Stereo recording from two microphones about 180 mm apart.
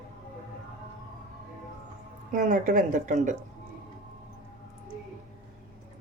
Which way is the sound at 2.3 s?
45° right (ahead or behind).